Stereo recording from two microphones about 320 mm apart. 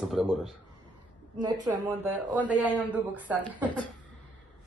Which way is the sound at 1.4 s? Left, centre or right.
Centre.